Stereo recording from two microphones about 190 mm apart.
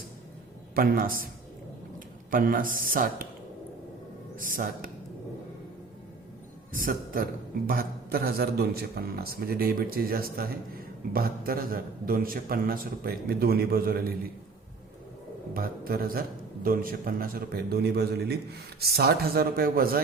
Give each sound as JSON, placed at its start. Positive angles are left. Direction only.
{"t": 0.8, "sound": "a man's voice", "side_deg": -50}
{"t": 2.3, "sound": "a man's voice", "side_deg": -45}
{"t": 4.4, "sound": "a man's voice", "side_deg": -45}
{"t": 6.7, "sound": "a man's voice", "side_deg": -45}
{"t": 15.5, "sound": "a man's voice", "side_deg": -50}